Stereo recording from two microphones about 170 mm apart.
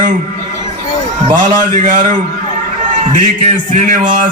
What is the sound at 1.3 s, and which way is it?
Speech, 30° right (ahead or behind).